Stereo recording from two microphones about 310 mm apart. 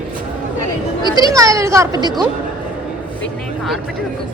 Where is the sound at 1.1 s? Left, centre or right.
Centre.